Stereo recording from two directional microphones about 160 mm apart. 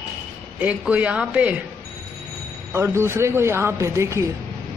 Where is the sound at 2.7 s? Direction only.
15° right (ahead or behind).